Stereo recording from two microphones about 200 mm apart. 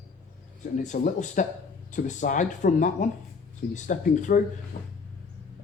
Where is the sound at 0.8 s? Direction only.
35° left (ahead or behind).